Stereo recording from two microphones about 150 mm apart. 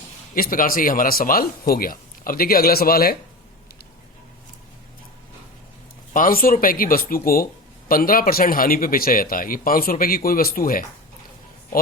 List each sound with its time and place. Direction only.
0.3 s a man's voice: 75° left (ahead or behind); by 3.2 s 90° left
6.1 s a man's voice: 65° left (ahead or behind)